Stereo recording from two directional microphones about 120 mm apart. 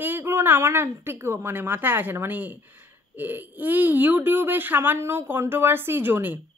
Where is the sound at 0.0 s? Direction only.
20° right (ahead or behind).